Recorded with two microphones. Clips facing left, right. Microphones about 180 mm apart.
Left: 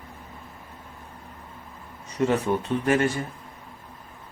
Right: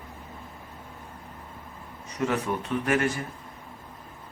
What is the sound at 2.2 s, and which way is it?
Speech, 30° left (ahead or behind).